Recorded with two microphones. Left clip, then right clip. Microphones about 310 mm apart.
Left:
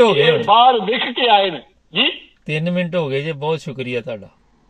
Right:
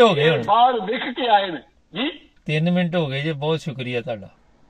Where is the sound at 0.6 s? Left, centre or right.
Left.